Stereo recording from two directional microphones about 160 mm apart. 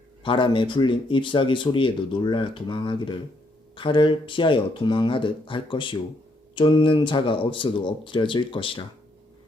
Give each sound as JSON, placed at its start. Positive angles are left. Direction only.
{"t": 0.2, "sound": "speech", "side_deg": 30}